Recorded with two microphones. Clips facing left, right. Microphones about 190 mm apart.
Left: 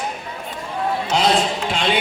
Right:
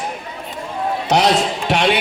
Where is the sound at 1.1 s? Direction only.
70° right (ahead or behind).